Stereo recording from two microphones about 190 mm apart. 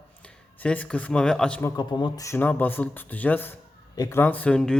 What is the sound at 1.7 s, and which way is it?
Speech, 20° left (ahead or behind).